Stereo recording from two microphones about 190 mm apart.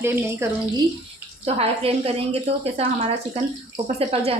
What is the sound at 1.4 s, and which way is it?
A woman's voice, 30° right (ahead or behind).